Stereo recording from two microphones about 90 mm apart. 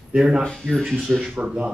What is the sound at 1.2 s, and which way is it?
Speech, 10° right (ahead or behind).